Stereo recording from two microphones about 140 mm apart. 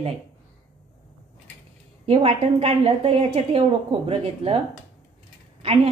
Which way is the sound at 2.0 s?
45° right (ahead or behind).